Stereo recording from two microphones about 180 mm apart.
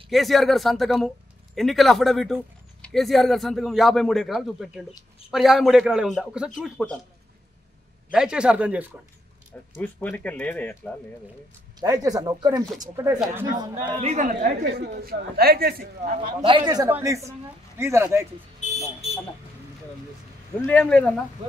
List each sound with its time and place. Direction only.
0.1 s a man's voice: centre (ahead or behind)
8.1 s a man's voice: 5° right (ahead or behind)
9.8 s speech: 10° left (ahead or behind)
11.8 s speech: 20° right (ahead or behind)
14.0 s speech: 45° right (ahead or behind)
14.8 s a man's voice: 60° right (ahead or behind)
16.0 s speech: 45° right (ahead or behind)
16.3 s speech: 30° right (ahead or behind)
18.6 s vehicle: 35° left (ahead or behind)
20.6 s speech: 10° left (ahead or behind)